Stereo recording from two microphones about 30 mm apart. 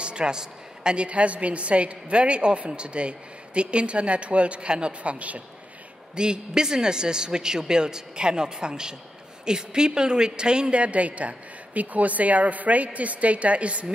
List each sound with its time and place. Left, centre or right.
0.0 s a sound: right
0.9 s a woman's voice: right
6.1 s speech: right
10.8 s a woman's voice: right